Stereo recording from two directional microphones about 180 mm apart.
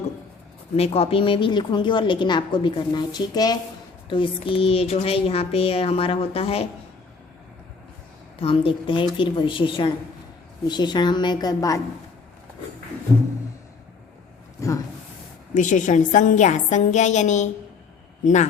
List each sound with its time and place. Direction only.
0.8 s a woman's voice: 35° left (ahead or behind)
8.4 s a woman's voice: 30° left (ahead or behind)
14.6 s speech: 15° left (ahead or behind)
15.5 s a woman's voice: 45° left (ahead or behind)